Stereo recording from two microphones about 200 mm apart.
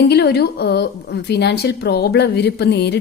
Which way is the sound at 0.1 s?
55° left (ahead or behind).